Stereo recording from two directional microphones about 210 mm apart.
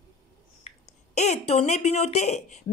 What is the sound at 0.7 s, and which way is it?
Finger snapping, 30° left (ahead or behind).